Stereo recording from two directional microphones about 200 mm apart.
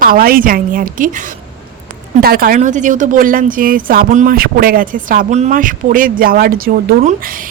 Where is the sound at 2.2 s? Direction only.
45° right (ahead or behind).